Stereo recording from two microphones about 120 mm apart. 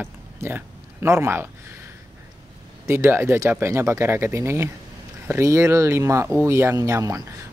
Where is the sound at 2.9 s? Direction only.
20° right (ahead or behind).